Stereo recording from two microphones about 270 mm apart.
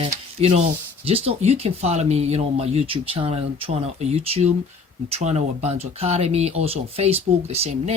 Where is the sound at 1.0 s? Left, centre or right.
Right.